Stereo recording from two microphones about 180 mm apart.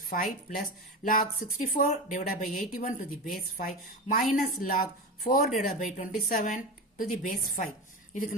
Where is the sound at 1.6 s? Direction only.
50° left (ahead or behind).